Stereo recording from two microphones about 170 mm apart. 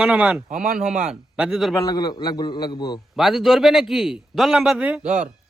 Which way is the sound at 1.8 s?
25° left (ahead or behind).